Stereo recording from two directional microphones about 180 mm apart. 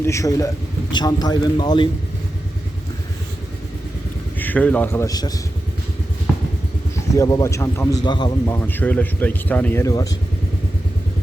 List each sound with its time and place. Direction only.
0.0 s a man's voice: 15° left (ahead or behind)
4.4 s speech: 10° left (ahead or behind)
6.3 s vehicle: centre (ahead or behind)
7.2 s a man's voice: 20° left (ahead or behind)
8.4 s speech: 10° left (ahead or behind)